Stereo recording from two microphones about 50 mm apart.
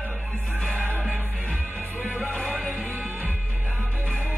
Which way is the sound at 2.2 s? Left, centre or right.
Left.